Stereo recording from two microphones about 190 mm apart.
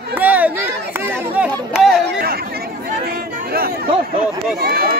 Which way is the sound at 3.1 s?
55° right (ahead or behind).